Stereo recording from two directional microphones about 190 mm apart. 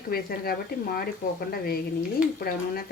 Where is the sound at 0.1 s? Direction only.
50° left (ahead or behind).